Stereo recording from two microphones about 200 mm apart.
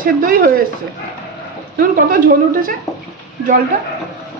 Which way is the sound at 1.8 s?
45° right (ahead or behind).